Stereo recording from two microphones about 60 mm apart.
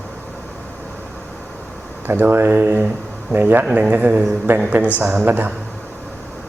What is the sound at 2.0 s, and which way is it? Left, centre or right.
A man's voice, right.